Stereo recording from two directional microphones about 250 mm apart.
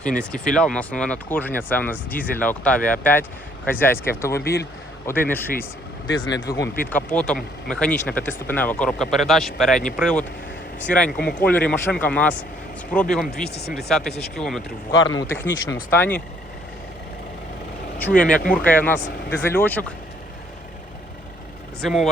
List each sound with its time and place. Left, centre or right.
0.0 s speech: centre
13.2 s speech: left
13.7 s speech: centre
14.9 s speech: centre
17.9 s speech: centre
21.8 s speech: centre